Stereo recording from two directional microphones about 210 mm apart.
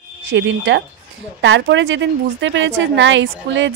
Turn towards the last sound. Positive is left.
turn(degrees=-60)  # may be behind; listen again after turning